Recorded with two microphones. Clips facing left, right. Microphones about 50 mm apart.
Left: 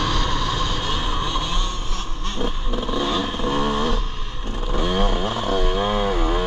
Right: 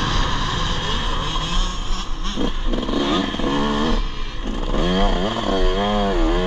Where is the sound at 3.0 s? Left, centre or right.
Centre.